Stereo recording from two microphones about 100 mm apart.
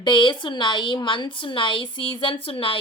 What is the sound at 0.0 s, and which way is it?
A woman's voice, 50° left (ahead or behind).